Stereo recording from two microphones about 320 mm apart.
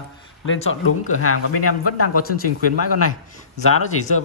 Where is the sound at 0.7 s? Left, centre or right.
Left.